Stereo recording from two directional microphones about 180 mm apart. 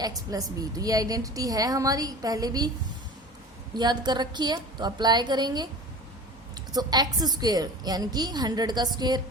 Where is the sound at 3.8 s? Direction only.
25° right (ahead or behind).